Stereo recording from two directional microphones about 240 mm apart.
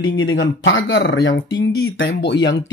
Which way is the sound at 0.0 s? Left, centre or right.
Left.